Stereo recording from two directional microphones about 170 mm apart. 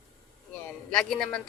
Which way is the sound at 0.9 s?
5° left (ahead or behind).